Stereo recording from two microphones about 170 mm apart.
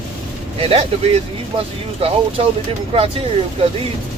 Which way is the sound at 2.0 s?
35° right (ahead or behind).